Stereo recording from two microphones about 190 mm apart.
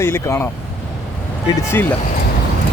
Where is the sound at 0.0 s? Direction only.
15° left (ahead or behind).